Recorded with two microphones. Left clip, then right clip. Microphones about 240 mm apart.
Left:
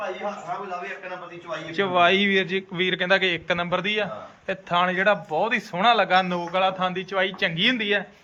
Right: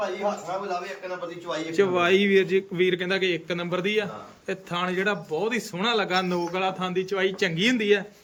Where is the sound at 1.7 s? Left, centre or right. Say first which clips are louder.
Left 2 dB; centre.